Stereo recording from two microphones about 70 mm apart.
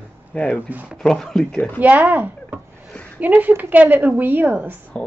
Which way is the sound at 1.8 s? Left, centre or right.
Right.